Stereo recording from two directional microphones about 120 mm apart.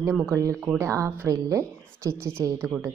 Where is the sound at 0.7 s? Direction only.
25° right (ahead or behind).